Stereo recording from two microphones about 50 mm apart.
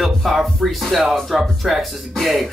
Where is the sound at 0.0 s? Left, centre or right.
Centre.